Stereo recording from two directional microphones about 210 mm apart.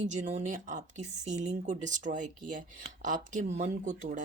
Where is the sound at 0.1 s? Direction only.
35° right (ahead or behind).